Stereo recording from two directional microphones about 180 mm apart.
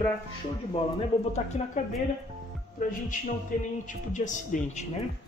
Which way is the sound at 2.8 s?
50° left (ahead or behind).